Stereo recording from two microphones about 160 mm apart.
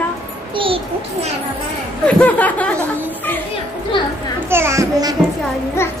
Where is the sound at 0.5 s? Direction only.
35° right (ahead or behind).